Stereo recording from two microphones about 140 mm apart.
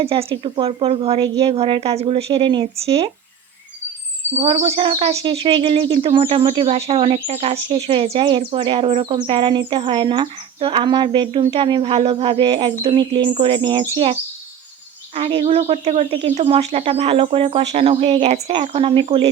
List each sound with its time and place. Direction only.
0.0 s speech: 45° right (ahead or behind)
4.4 s speech: 45° right (ahead or behind)